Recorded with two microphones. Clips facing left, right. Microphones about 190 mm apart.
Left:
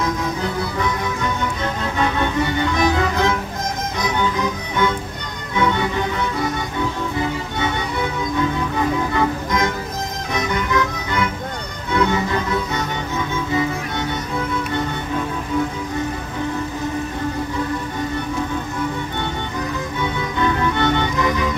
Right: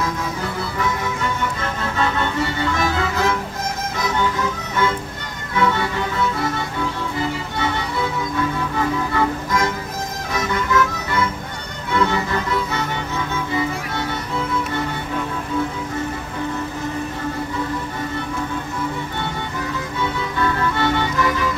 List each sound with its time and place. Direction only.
0.0 s music: 20° left (ahead or behind)
7.5 s music: 20° left (ahead or behind)
9.1 s music: 20° left (ahead or behind)
20.0 s music: 20° left (ahead or behind)